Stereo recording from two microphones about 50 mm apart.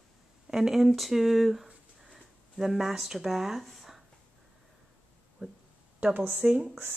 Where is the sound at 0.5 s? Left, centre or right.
Centre.